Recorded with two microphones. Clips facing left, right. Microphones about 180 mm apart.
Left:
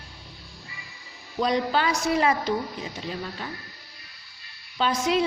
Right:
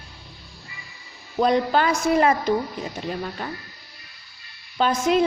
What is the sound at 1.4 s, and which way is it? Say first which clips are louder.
A woman's voice: right 4 dB; 50° right (ahead or behind).